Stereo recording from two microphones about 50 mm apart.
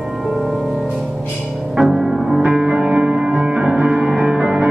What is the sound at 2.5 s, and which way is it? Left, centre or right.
Music, centre.